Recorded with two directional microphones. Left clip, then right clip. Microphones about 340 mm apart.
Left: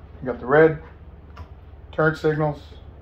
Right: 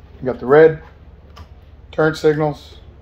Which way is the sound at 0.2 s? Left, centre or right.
Right.